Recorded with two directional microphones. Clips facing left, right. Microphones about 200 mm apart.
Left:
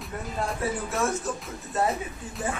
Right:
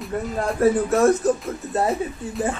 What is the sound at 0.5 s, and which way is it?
Music, 40° right (ahead or behind).